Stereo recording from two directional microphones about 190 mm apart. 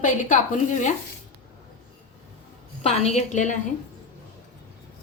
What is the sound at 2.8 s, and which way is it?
Speech, 35° left (ahead or behind).